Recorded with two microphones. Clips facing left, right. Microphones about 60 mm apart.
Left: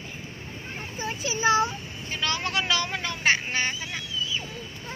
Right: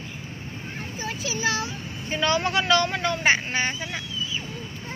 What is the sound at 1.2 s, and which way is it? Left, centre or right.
Child singing, left.